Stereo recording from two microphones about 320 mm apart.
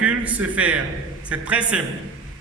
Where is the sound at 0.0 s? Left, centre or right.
Centre.